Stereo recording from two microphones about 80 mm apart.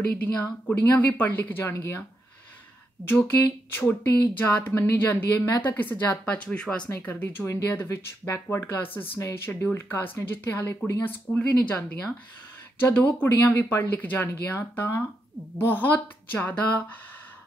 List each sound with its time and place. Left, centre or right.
0.1 s a woman's voice: centre
3.1 s a woman's voice: left
6.9 s speech: left
11.1 s speech: centre